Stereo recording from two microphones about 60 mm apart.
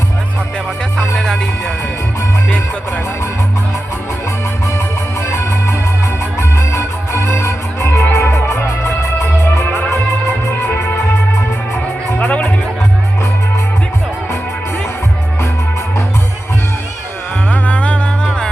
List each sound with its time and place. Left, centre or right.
1.2 s music: centre
5.2 s music: left
12.2 s music: left
17.5 s music: left